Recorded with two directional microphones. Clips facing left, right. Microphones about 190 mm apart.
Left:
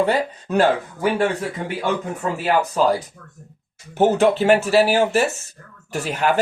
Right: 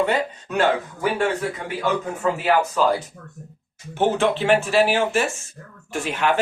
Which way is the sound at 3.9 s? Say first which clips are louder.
Left 4 dB; 40° left (ahead or behind).